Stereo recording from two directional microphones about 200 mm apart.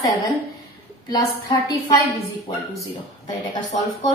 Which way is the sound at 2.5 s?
20° left (ahead or behind).